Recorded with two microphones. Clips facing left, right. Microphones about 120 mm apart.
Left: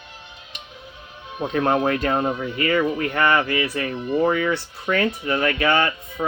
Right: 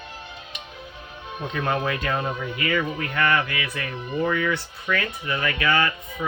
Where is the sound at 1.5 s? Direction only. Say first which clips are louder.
Left 6 dB; 40° left (ahead or behind).